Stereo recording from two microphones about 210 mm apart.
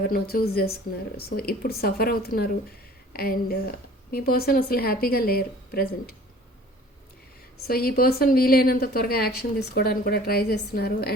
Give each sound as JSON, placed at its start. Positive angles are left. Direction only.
{"t": 0.1, "sound": "a woman's voice", "side_deg": 45}
{"t": 7.7, "sound": "a woman's voice", "side_deg": 45}